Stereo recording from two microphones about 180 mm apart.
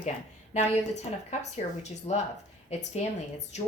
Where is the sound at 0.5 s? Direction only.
40° left (ahead or behind).